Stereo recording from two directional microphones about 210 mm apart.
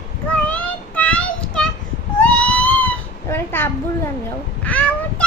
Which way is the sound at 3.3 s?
10° left (ahead or behind).